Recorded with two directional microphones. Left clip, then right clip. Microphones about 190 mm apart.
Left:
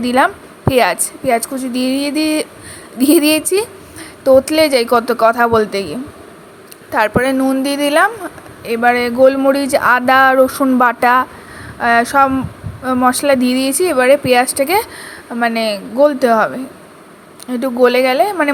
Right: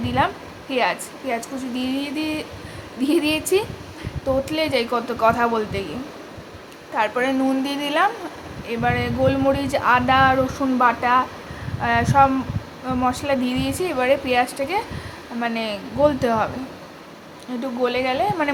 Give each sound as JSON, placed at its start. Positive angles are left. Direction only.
{"t": 0.0, "sound": "a woman's voice", "side_deg": 35}
{"t": 6.9, "sound": "a woman's voice", "side_deg": 30}
{"t": 17.5, "sound": "a woman's voice", "side_deg": 35}